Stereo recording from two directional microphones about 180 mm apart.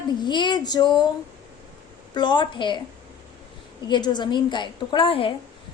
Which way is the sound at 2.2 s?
25° left (ahead or behind).